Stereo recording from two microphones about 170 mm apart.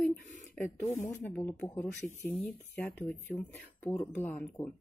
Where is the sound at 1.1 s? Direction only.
10° left (ahead or behind).